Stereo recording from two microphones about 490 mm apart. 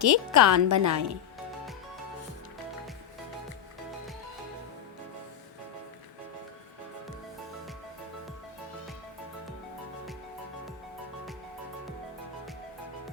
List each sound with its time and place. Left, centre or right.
0.0 s a woman's voice: right